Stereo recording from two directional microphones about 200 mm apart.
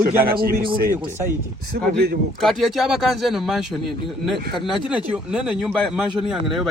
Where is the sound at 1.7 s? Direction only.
55° right (ahead or behind).